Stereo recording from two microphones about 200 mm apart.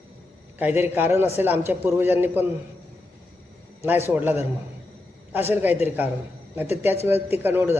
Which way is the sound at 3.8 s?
10° right (ahead or behind).